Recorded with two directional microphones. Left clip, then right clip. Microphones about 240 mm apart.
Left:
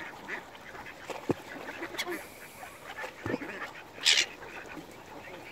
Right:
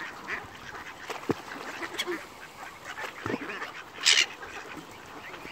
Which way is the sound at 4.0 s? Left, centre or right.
Centre.